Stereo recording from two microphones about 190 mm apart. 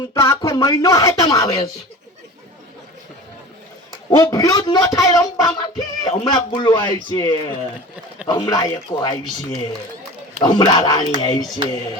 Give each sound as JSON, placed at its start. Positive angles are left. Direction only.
{"t": 0.1, "sound": "speech", "side_deg": 15}
{"t": 4.2, "sound": "music", "side_deg": 20}
{"t": 10.4, "sound": "music", "side_deg": 20}